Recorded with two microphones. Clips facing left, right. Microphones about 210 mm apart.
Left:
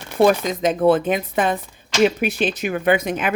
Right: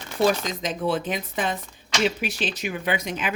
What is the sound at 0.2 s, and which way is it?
A woman's voice, 55° left (ahead or behind).